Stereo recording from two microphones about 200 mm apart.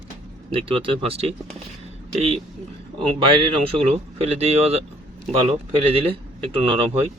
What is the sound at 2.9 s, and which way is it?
Speech, 25° right (ahead or behind).